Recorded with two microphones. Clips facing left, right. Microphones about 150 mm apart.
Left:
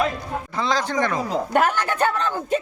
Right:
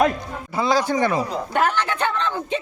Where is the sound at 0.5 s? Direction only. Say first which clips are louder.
Right 3 dB; 10° right (ahead or behind).